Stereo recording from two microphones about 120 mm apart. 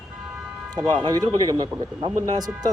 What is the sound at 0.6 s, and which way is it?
Speech, 35° right (ahead or behind).